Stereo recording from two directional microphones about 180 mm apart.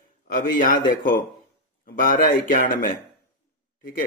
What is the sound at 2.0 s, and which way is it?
Speech, 50° left (ahead or behind).